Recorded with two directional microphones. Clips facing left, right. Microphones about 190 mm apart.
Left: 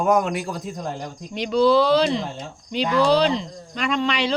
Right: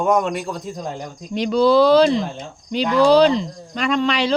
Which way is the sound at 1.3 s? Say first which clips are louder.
Right 2 dB; 40° right (ahead or behind).